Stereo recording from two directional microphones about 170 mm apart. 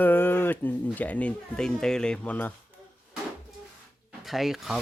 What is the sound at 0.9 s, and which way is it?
Speech, 10° left (ahead or behind).